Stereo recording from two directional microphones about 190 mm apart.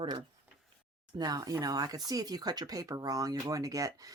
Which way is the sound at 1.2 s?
20° right (ahead or behind).